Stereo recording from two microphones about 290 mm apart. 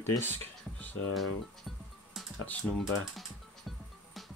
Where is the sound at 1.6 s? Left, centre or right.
Centre.